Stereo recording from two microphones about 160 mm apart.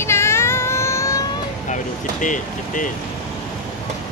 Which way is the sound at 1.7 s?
50° left (ahead or behind).